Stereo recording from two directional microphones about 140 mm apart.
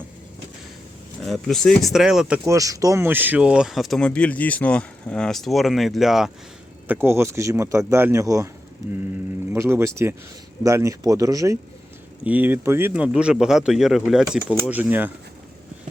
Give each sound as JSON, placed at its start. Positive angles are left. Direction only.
{"t": 1.3, "sound": "speech", "side_deg": 0}
{"t": 2.5, "sound": "speech", "side_deg": -25}
{"t": 6.8, "sound": "speech", "side_deg": -15}
{"t": 9.5, "sound": "speech", "side_deg": -20}
{"t": 12.2, "sound": "speech", "side_deg": -10}